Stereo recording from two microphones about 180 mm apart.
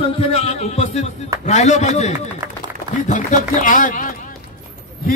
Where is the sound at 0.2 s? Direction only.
35° left (ahead or behind).